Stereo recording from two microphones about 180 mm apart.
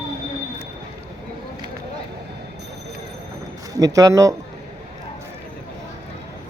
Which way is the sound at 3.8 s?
20° right (ahead or behind).